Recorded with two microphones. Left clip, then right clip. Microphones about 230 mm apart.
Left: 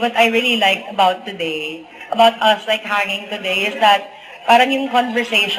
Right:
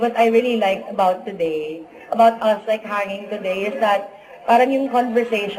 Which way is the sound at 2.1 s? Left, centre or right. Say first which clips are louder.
Left 2 dB; centre.